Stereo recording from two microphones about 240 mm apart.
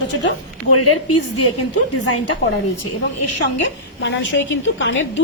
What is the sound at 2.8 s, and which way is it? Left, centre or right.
Speech, left.